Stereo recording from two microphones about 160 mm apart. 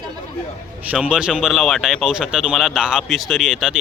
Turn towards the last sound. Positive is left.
turn(degrees=-5)  # may be behind; listen again after turning